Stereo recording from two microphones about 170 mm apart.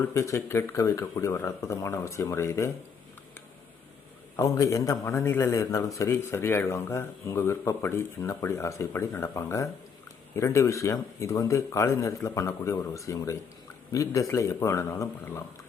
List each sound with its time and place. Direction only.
0.1 s a man's voice: 15° left (ahead or behind)
4.4 s a man's voice: 20° left (ahead or behind)